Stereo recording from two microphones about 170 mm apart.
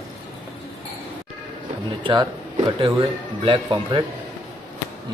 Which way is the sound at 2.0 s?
30° right (ahead or behind).